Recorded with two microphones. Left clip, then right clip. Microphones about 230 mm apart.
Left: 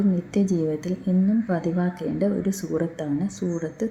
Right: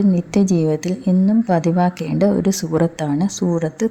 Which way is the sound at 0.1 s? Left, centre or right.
Right.